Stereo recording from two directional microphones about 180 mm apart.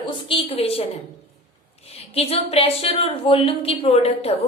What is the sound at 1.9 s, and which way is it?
A woman's voice, 35° left (ahead or behind).